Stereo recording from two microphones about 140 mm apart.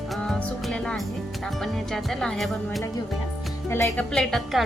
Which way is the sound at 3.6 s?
20° left (ahead or behind).